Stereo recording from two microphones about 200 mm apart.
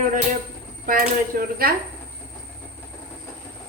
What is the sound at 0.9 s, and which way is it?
Speech, 45° right (ahead or behind).